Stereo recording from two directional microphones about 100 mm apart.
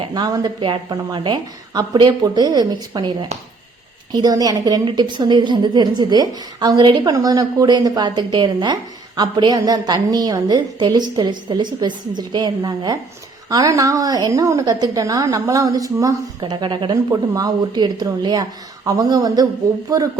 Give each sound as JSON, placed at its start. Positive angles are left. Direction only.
{"t": 0.1, "sound": "a woman's voice", "side_deg": -40}
{"t": 0.6, "sound": "a woman's voice", "side_deg": -50}
{"t": 16.4, "sound": "a woman's voice", "side_deg": -50}
{"t": 17.1, "sound": "a woman's voice", "side_deg": -40}